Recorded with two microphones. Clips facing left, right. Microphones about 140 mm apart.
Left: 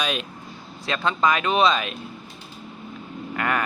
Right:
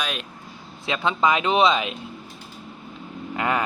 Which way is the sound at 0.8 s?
15° right (ahead or behind).